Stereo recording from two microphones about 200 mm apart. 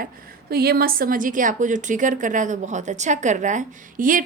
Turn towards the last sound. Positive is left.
turn(degrees=-40)  # may be behind; listen again after turning